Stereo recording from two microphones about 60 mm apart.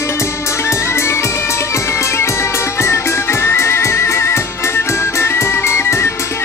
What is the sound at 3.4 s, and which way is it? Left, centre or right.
Music, left.